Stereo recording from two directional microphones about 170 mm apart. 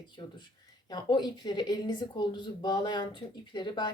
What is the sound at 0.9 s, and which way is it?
Speech, 25° left (ahead or behind).